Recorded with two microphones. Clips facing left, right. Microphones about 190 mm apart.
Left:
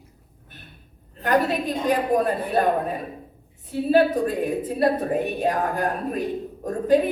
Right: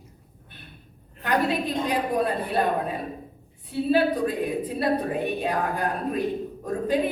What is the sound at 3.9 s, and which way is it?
A woman's voice, 45° left (ahead or behind).